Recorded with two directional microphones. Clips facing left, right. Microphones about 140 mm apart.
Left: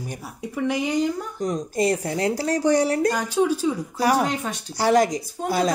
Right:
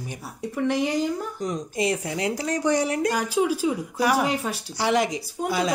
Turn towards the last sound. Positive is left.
turn(degrees=40)  # may be behind; listen again after turning